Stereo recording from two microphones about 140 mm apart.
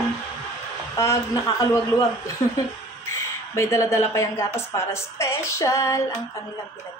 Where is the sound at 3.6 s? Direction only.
20° left (ahead or behind).